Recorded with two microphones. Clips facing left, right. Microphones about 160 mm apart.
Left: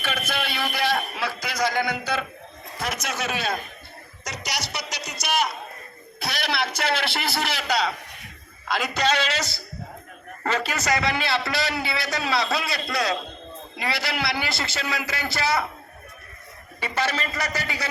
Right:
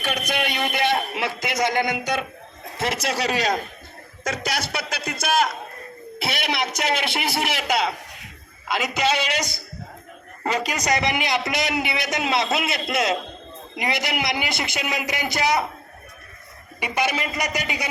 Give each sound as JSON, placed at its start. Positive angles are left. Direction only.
{"t": 0.0, "sound": "a sound", "side_deg": -15}
{"t": 1.2, "sound": "a man's voice", "side_deg": -20}
{"t": 4.2, "sound": "a man's voice", "side_deg": -50}
{"t": 6.2, "sound": "a man's voice", "side_deg": -20}
{"t": 8.6, "sound": "a man's voice", "side_deg": -10}
{"t": 16.8, "sound": "a man's voice", "side_deg": -15}